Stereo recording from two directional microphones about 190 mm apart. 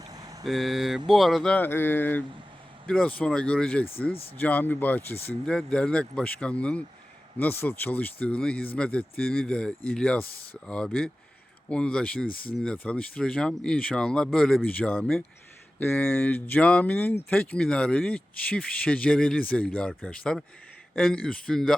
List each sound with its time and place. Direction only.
0.0 s vehicle: 20° right (ahead or behind)
0.4 s speech: centre (ahead or behind)